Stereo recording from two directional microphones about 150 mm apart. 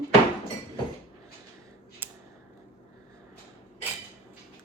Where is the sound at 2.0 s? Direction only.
15° right (ahead or behind).